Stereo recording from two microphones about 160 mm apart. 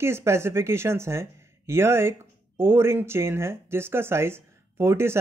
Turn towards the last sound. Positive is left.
turn(degrees=-15)  # may be behind; listen again after turning